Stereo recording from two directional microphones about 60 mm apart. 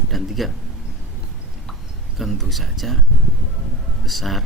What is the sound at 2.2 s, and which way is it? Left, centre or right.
Speech, centre.